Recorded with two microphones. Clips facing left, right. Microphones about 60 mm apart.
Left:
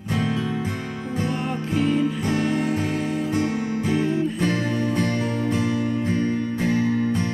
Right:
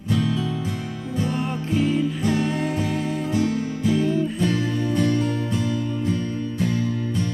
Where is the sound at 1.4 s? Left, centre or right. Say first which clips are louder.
Even; centre.